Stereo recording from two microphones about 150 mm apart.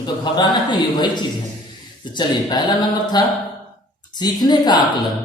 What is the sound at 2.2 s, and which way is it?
Speech, 30° left (ahead or behind).